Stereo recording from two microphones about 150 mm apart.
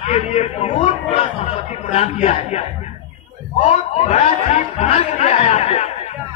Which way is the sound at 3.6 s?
50° left (ahead or behind).